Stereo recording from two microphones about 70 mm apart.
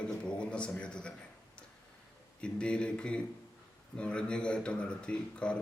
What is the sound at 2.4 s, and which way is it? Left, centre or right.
A man's voice, centre.